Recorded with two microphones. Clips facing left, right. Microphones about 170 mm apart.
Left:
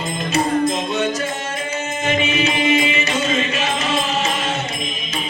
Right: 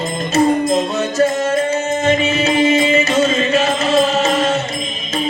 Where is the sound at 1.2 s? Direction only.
40° right (ahead or behind).